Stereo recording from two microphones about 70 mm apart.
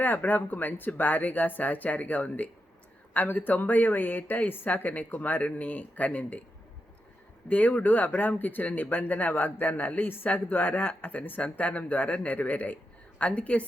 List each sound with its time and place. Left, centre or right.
0.0 s speech: left
7.4 s speech: left